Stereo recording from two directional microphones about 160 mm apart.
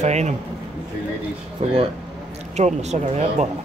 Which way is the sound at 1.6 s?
45° right (ahead or behind).